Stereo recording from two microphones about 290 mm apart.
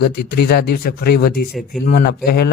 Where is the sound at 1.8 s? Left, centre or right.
Left.